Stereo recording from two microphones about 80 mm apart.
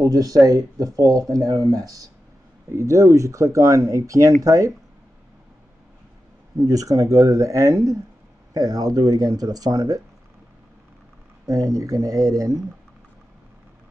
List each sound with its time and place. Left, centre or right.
0.0 s speech: right
6.6 s speech: right
11.4 s speech: right